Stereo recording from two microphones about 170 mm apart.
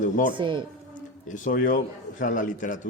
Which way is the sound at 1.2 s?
50° left (ahead or behind).